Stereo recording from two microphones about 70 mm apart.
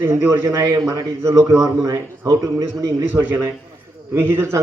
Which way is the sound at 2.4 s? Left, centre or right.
Right.